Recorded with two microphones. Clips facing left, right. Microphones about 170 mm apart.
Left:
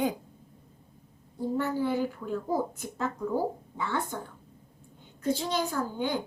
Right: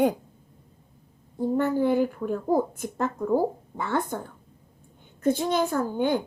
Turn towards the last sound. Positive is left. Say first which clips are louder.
# right 6 dB
turn(degrees=-55)  # may be behind; listen again after turning